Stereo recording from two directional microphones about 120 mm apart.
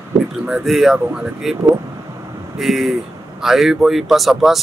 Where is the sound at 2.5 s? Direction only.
Centre (ahead or behind).